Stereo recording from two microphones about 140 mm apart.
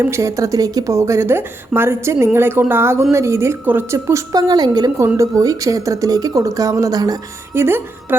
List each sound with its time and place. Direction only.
0.0 s speech: 20° right (ahead or behind)